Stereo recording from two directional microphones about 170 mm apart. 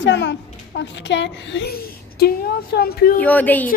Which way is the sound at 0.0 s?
90° left.